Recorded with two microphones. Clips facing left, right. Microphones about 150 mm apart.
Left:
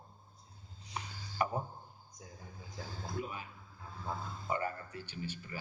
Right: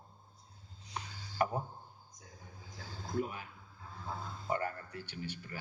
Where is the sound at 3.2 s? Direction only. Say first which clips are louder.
Right 5 dB; 60° right (ahead or behind).